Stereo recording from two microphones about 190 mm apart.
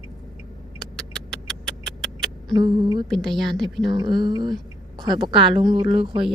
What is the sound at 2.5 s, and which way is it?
Speech, 20° right (ahead or behind).